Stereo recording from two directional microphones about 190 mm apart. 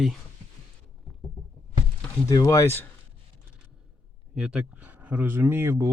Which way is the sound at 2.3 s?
20° left (ahead or behind).